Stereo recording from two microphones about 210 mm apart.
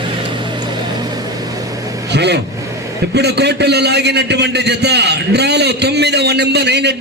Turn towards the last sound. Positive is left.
turn(degrees=-55)  # may be behind; listen again after turning